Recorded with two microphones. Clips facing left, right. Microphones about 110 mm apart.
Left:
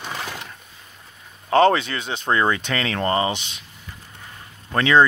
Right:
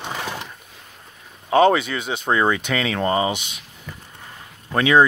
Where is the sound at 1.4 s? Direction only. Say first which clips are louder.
Right 1 dB; 10° right (ahead or behind).